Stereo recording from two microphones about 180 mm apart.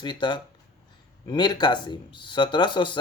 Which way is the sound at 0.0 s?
25° left (ahead or behind).